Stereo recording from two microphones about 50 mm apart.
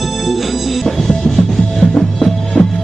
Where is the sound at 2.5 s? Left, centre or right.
Left.